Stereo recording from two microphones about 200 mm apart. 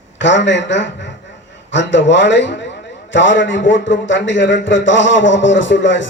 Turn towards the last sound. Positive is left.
turn(degrees=65)  # may be behind; listen again after turning